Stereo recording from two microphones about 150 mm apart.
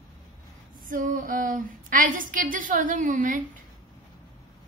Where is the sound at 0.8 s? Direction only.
65° right (ahead or behind).